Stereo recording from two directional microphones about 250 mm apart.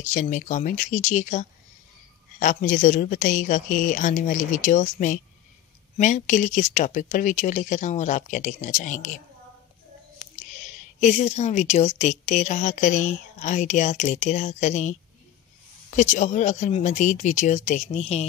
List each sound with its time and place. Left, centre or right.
0.0 s a woman's voice: left
10.1 s speech: left
16.0 s speech: left